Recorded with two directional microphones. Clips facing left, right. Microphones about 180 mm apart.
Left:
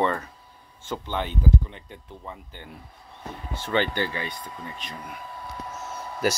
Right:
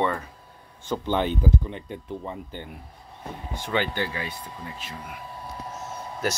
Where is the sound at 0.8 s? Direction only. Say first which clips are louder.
Right 5 dB; 15° right (ahead or behind).